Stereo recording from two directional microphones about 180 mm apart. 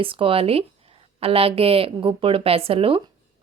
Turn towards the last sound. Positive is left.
turn(degrees=-30)  # may be behind; listen again after turning